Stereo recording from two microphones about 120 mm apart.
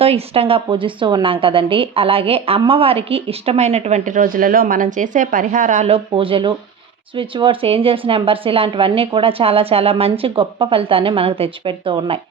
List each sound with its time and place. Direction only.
0.0 s a woman's voice: 55° right (ahead or behind); by 5.9 s 90° right
5.9 s a woman's voice: 50° right (ahead or behind)